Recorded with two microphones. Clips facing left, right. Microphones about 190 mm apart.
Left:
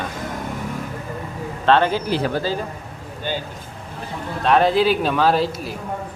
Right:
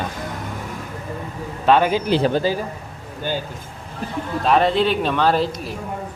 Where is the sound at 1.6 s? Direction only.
10° right (ahead or behind).